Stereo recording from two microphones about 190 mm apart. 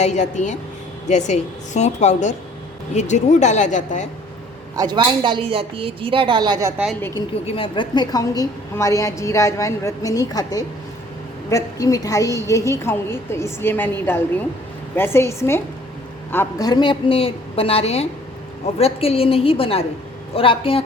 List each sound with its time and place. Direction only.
0.0 s a woman's voice: 40° left (ahead or behind)
4.8 s a woman's voice: 25° right (ahead or behind)
7.0 s a woman's voice: 20° left (ahead or behind)